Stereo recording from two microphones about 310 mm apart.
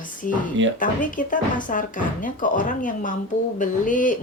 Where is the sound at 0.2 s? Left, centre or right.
Left.